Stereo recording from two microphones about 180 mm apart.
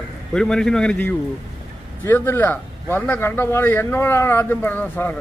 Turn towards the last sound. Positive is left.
turn(degrees=10)  # may be behind; listen again after turning